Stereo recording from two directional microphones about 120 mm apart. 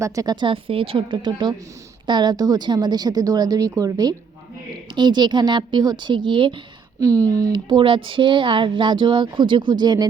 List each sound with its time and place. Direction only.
0.0 s speech: 30° right (ahead or behind)
7.0 s speech: 30° right (ahead or behind)
7.5 s speech: 45° right (ahead or behind)